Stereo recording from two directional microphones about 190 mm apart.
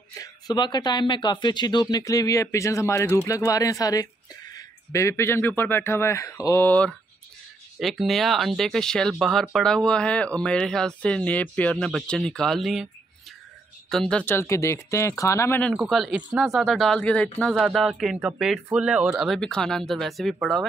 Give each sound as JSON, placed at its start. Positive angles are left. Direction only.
{"t": 0.1, "sound": "speech", "side_deg": 20}
{"t": 13.8, "sound": "speech", "side_deg": 5}
{"t": 15.7, "sound": "speech", "side_deg": 0}